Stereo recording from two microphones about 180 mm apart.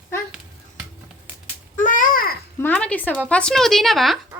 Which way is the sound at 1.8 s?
50° left (ahead or behind).